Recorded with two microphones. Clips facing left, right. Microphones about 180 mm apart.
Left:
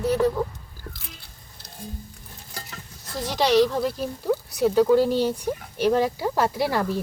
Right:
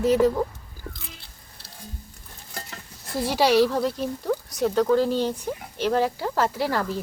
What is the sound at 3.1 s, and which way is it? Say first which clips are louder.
Speech: right 2 dB; 10° right (ahead or behind).